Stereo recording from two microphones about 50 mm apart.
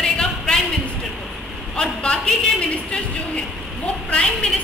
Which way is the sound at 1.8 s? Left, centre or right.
Centre.